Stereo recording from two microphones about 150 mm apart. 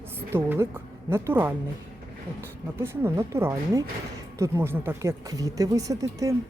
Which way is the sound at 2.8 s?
15° right (ahead or behind).